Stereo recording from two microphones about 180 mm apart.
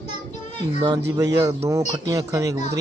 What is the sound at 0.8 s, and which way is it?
Speech, 20° right (ahead or behind).